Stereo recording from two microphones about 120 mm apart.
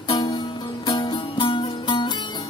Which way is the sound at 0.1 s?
35° left (ahead or behind).